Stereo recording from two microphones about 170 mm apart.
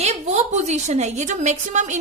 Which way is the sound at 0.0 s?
40° right (ahead or behind).